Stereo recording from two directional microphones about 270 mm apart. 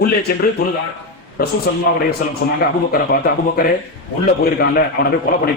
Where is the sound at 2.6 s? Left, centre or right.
Left.